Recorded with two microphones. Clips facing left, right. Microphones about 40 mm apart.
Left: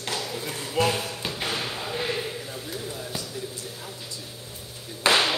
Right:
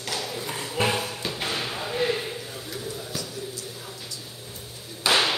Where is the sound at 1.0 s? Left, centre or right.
Centre.